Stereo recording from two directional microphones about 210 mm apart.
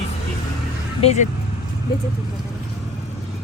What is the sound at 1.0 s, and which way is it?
Speech, 30° left (ahead or behind).